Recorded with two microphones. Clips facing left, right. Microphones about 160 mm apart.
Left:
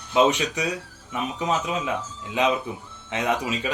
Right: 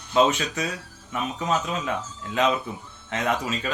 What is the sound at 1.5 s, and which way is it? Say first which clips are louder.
Speech: even; 15° left (ahead or behind).